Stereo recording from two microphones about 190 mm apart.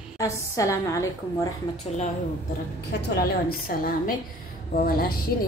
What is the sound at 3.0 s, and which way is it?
A woman's voice, 55° left (ahead or behind).